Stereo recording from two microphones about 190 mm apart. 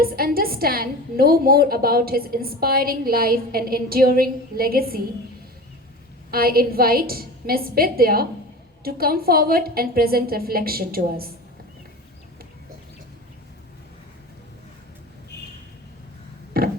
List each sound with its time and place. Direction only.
0.0 s a woman's voice: 50° right (ahead or behind)
6.3 s a woman's voice: 50° right (ahead or behind)
15.3 s a sound: 60° left (ahead or behind)